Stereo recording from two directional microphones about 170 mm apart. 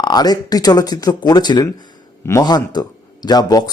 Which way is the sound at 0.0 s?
25° left (ahead or behind).